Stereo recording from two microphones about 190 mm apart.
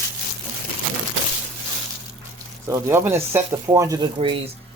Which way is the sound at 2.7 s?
15° right (ahead or behind).